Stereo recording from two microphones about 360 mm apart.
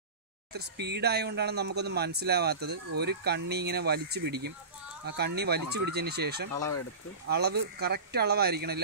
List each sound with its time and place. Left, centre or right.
0.5 s speech: right